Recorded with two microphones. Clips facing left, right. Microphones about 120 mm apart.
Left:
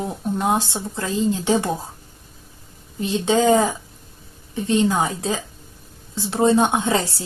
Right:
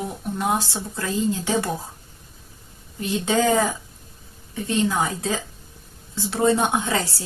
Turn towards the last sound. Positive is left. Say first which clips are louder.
# left 3 dB
turn(degrees=20)  # may be behind; listen again after turning